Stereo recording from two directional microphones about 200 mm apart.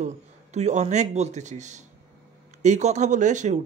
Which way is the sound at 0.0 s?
35° right (ahead or behind).